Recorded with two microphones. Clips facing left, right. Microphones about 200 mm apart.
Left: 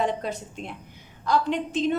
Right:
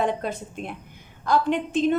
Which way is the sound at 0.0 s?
55° right (ahead or behind).